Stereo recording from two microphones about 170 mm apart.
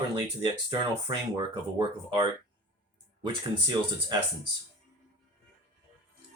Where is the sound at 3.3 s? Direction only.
25° right (ahead or behind).